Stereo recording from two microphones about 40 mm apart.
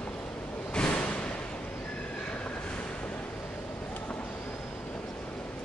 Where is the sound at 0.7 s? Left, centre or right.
Left.